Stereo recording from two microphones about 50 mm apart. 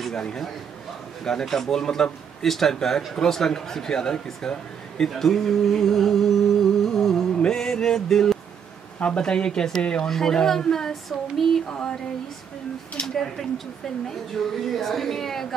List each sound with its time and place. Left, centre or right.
1.2 s speech: centre
5.1 s music: centre
9.0 s speech: centre
11.7 s speech: centre
13.0 s speech: centre